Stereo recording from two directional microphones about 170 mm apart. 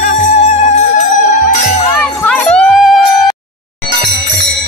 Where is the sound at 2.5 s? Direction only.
5° left (ahead or behind).